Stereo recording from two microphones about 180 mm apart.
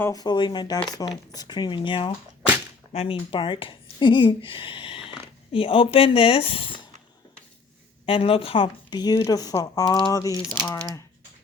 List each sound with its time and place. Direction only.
0.0 s speech: 20° left (ahead or behind)
8.0 s speech: 30° left (ahead or behind); by 10.8 s 10° left (ahead or behind)